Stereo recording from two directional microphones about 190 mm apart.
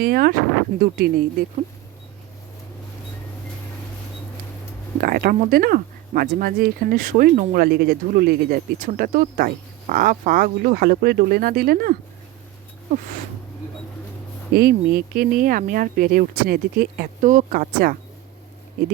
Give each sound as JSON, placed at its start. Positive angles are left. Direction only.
{"t": 0.0, "sound": "speech", "side_deg": -55}
{"t": 4.9, "sound": "speech", "side_deg": -50}
{"t": 14.5, "sound": "speech", "side_deg": -55}